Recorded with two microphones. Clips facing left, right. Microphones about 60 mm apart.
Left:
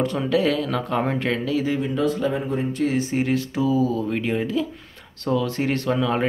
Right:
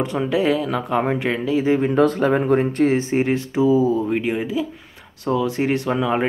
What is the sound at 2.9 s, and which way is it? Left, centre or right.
Speech, right.